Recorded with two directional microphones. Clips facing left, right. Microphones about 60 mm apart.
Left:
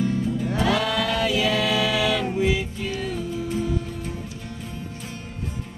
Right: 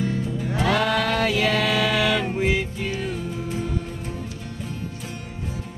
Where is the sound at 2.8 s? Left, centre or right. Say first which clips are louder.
Right 1 dB; right.